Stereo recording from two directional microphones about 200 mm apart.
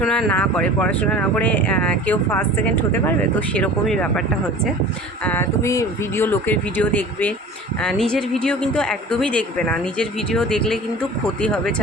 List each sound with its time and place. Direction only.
0.0 s a woman's voice: 5° left (ahead or behind)
5.2 s a woman's voice: 10° left (ahead or behind)